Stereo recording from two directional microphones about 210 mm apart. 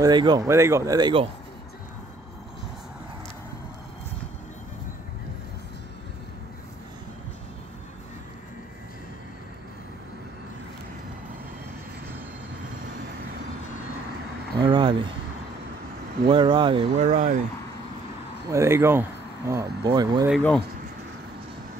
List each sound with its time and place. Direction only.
0.0 s speech: 20° right (ahead or behind)
14.6 s a sound: 25° right (ahead or behind)
16.3 s speech: 20° right (ahead or behind)
18.5 s speech: 15° right (ahead or behind)
20.2 s speech: 5° left (ahead or behind)